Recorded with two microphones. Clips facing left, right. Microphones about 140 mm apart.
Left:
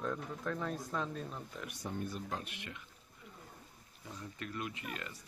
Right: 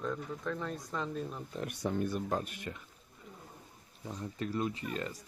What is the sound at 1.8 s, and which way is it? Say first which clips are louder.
Speech: right 7 dB; 80° right.